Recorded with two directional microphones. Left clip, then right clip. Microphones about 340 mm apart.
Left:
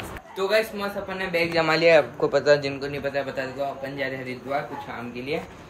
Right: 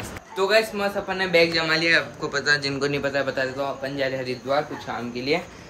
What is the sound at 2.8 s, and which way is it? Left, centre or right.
Speech, centre.